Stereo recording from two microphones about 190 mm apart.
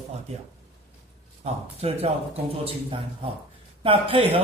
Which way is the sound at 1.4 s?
30° right (ahead or behind).